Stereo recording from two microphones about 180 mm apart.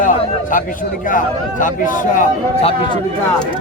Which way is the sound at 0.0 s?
45° left (ahead or behind).